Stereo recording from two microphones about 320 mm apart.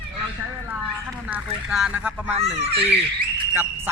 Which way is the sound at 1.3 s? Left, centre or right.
Centre.